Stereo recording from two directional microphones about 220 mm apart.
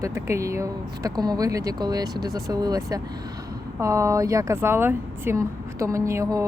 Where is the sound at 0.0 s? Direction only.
15° right (ahead or behind).